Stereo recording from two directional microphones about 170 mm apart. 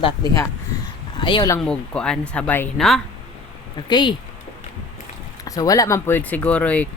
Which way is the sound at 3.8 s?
25° left (ahead or behind).